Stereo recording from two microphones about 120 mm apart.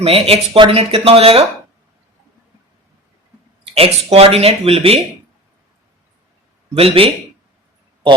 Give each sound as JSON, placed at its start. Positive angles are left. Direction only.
{"t": 0.0, "sound": "speech", "side_deg": -50}
{"t": 3.8, "sound": "speech", "side_deg": -55}
{"t": 6.7, "sound": "speech", "side_deg": -50}